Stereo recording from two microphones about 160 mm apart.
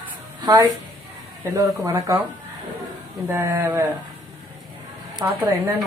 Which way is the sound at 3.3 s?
20° right (ahead or behind).